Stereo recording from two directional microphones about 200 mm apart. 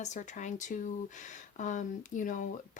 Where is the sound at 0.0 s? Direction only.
35° left (ahead or behind).